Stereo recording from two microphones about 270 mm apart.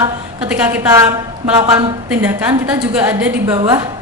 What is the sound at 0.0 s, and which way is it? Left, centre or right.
A woman's voice, centre.